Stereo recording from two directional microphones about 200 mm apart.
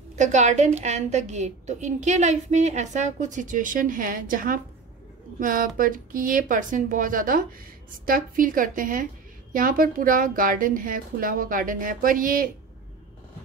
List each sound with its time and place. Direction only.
0.2 s a woman's voice: 35° right (ahead or behind)